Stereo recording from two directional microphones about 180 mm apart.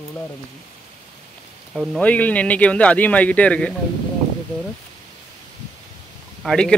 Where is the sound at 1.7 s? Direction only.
5° left (ahead or behind).